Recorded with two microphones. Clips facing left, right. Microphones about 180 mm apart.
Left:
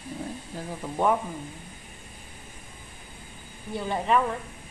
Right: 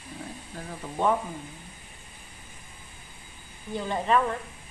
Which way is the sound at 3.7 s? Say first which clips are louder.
Even; 5° left (ahead or behind).